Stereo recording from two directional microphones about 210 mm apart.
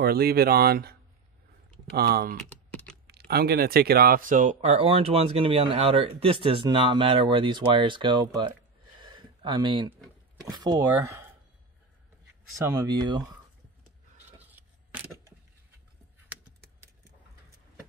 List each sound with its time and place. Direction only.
0.0 s speech: 45° right (ahead or behind)
2.0 s speech: 50° right (ahead or behind)
2.5 s typing: 5° left (ahead or behind)
3.1 s speech: 50° right (ahead or behind); by 8.5 s 20° right (ahead or behind)
9.0 s a sound: 20° right (ahead or behind)
10.4 s speech: 20° right (ahead or behind)
12.5 s speech: 15° right (ahead or behind)
14.4 s a sound: 10° right (ahead or behind)